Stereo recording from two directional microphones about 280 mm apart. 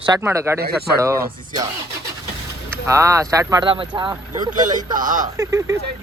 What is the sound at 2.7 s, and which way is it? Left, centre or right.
Speech, centre.